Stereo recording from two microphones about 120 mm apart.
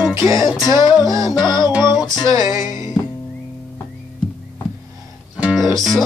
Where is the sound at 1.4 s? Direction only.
35° left (ahead or behind).